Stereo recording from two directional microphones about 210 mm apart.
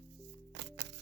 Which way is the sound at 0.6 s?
55° right (ahead or behind).